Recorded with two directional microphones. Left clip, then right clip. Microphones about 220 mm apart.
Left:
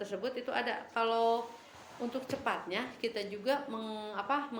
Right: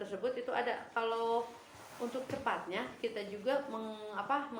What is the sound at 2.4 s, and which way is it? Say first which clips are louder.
Speech: left 1 dB; 50° left (ahead or behind).